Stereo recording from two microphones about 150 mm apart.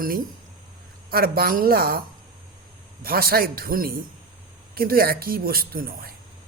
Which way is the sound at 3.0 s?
80° right.